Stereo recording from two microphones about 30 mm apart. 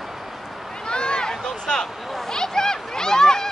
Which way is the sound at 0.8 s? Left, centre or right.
Left.